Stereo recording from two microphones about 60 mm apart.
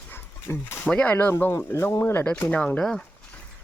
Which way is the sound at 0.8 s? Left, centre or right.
Left.